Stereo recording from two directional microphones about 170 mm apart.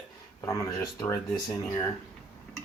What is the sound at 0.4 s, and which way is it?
Speech, 20° left (ahead or behind).